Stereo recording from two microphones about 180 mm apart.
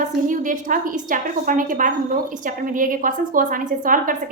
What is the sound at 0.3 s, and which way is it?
A woman's voice, 45° right (ahead or behind).